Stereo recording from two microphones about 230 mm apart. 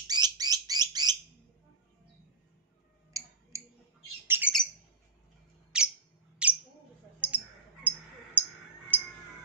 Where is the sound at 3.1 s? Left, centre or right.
Centre.